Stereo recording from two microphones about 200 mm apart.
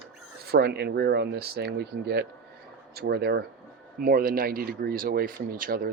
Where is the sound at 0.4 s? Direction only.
50° right (ahead or behind).